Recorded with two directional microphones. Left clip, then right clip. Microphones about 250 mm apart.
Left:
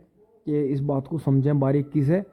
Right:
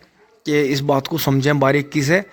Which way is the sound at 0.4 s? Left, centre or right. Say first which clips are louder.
Right 8 dB; centre.